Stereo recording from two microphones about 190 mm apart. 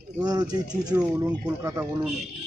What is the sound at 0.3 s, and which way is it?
Speech, 20° right (ahead or behind).